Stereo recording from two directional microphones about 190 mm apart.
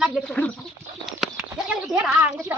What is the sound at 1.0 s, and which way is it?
Livestock, centre (ahead or behind).